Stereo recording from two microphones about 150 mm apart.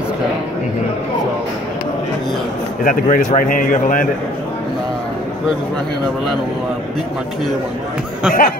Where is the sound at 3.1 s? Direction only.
65° left (ahead or behind).